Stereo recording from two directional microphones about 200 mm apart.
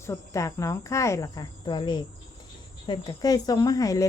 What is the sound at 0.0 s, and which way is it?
Speech, 15° left (ahead or behind).